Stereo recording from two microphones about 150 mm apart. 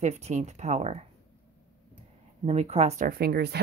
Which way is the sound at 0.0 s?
50° right (ahead or behind).